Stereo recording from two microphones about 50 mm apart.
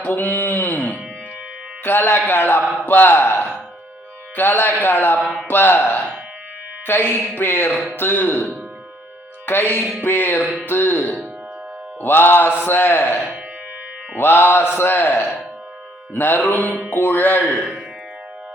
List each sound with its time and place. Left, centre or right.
0.0 s speech: left
1.8 s a man's voice: left
9.5 s a man's voice: left
16.1 s a man's voice: left